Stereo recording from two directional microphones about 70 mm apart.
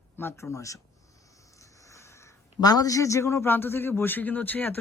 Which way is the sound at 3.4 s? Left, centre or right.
Left.